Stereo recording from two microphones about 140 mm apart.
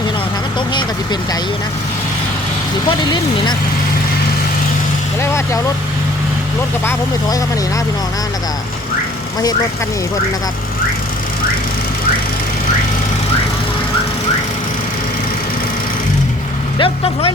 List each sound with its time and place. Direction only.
3.0 s speech: 30° left (ahead or behind)
16.7 s speech: 40° left (ahead or behind)